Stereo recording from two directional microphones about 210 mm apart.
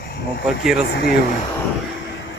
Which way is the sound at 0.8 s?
50° left (ahead or behind).